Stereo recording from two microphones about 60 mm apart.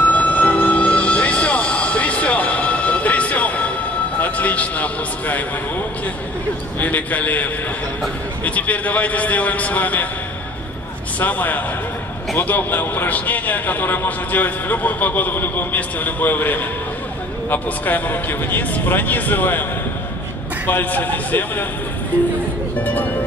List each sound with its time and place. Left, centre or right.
0.0 s music: left
4.2 s a sound: left
6.8 s a man's voice: left
8.5 s a man's voice: left
11.1 s a man's voice: left
20.6 s a man's voice: left
22.8 s speech: left